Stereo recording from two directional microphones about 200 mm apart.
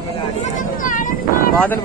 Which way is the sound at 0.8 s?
40° left (ahead or behind).